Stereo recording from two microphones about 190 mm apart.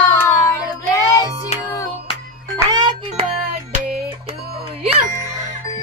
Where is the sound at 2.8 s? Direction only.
25° right (ahead or behind).